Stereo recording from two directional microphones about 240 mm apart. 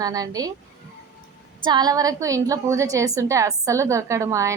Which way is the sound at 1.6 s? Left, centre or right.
Centre.